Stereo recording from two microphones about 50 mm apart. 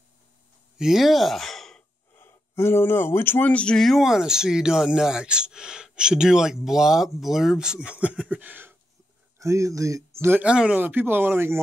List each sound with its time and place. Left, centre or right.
0.7 s speech: centre
2.1 s speech: left
3.4 s speech: left
3.7 s speech: centre
4.0 s speech: centre
7.9 s a sound: right
9.4 s speech: right
10.4 s speech: right
10.8 s speech: right